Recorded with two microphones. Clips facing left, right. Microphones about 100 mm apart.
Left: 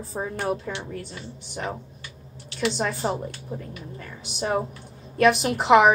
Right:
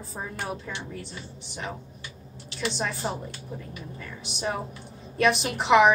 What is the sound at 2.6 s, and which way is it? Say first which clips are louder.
A woman's voice: left 4 dB; 45° left (ahead or behind).